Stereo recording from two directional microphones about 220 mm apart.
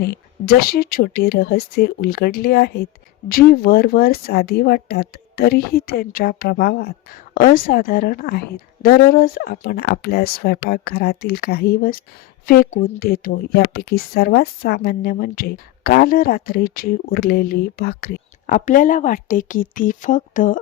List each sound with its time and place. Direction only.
0.0 s speech: 45° left (ahead or behind)